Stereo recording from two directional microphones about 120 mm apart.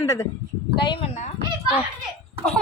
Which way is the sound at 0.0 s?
25° left (ahead or behind).